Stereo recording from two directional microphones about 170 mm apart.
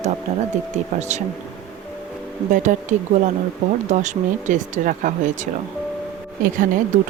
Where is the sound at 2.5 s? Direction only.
50° right (ahead or behind).